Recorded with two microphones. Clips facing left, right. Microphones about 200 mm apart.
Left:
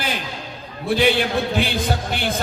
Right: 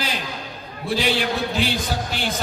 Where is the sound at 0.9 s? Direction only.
55° left (ahead or behind).